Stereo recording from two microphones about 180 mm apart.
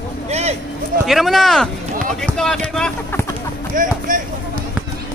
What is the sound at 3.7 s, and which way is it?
Speech, 45° right (ahead or behind).